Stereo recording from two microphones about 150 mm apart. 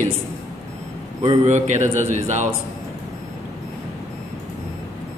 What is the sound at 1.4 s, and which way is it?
A man's voice, 50° right (ahead or behind).